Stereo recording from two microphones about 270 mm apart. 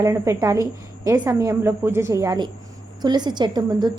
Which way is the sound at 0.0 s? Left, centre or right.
Centre.